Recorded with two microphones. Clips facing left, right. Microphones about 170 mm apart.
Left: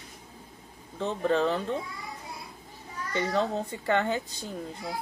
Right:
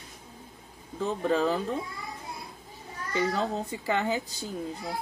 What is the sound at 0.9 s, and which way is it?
Speech, 5° right (ahead or behind).